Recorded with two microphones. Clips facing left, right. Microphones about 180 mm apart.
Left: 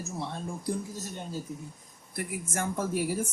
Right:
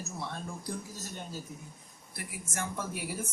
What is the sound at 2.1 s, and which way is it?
A woman's voice, 50° left (ahead or behind).